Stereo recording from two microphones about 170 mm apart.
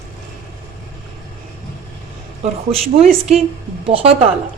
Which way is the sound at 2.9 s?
35° right (ahead or behind).